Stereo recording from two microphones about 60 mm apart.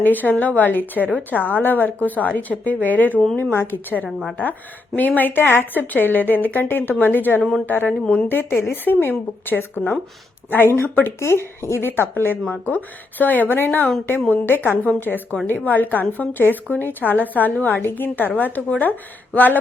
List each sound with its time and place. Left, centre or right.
0.0 s a woman's voice: left
3.5 s a woman's voice: left
8.0 s a woman's voice: left
8.3 s a woman's voice: left
10.8 s a woman's voice: left
11.2 s a woman's voice: left